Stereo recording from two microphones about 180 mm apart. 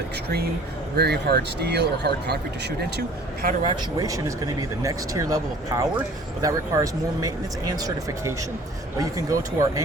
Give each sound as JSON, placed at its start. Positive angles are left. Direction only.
{"t": 0.9, "sound": "speech", "side_deg": -65}
{"t": 3.6, "sound": "speech", "side_deg": -20}